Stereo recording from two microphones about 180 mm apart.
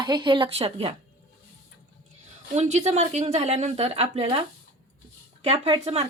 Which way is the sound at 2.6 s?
40° right (ahead or behind).